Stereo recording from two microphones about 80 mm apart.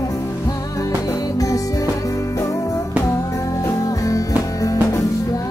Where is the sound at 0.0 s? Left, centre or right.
Left.